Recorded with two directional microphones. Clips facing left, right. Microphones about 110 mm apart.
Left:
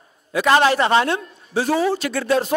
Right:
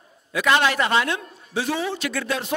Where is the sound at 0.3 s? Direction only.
35° left (ahead or behind).